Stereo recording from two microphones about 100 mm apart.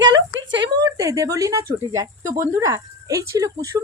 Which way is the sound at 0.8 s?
35° right (ahead or behind).